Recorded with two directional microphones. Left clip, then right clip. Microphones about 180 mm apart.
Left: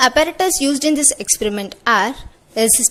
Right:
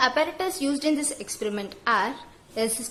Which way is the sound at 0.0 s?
40° left (ahead or behind).